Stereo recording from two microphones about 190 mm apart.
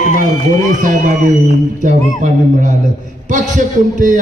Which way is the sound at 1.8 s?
40° right (ahead or behind).